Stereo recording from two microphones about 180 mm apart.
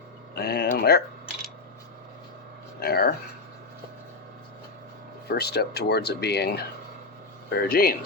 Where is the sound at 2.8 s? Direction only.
60° left (ahead or behind).